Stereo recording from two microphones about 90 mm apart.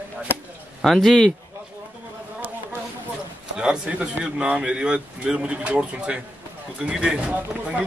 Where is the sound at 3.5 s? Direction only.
10° right (ahead or behind).